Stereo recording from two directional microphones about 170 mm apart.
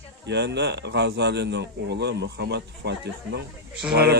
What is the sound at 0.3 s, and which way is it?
Speech, 90° right.